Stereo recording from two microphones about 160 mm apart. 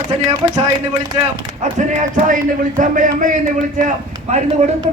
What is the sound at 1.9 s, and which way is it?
A man's voice, 55° right (ahead or behind).